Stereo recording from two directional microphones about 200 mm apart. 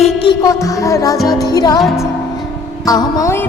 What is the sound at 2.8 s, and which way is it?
Music, 20° left (ahead or behind).